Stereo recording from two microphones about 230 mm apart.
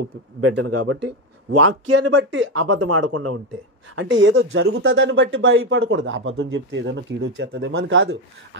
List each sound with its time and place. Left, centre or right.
0.4 s a man's voice: right
2.1 s speech: right
3.9 s speech: right